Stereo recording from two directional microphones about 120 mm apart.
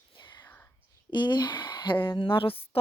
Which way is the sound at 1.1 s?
40° left (ahead or behind).